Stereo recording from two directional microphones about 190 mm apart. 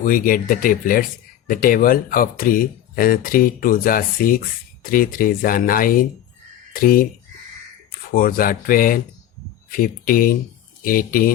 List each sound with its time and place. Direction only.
0.0 s speech: 45° left (ahead or behind)
8.1 s speech: 50° left (ahead or behind)